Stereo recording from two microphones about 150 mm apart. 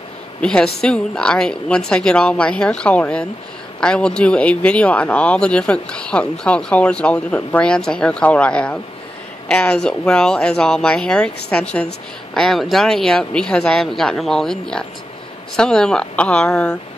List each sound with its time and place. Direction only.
0.4 s speech: 5° left (ahead or behind)